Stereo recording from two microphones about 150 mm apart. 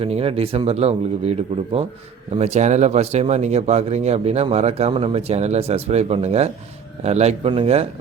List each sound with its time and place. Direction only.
0.0 s a man's voice: 40° right (ahead or behind)